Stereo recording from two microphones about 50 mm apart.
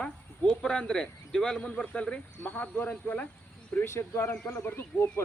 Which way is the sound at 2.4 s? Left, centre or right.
Left.